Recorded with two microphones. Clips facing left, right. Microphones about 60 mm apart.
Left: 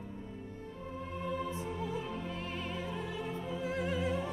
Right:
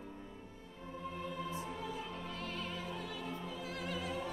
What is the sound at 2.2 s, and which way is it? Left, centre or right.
Opera, left.